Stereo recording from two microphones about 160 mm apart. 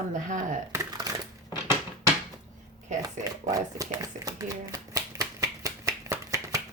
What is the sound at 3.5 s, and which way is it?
Shuffling cards, 20° right (ahead or behind).